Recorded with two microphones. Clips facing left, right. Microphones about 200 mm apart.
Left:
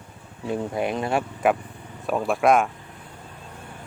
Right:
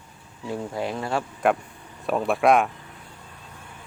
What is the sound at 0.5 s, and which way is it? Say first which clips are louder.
Speech: left 3 dB; 20° left (ahead or behind).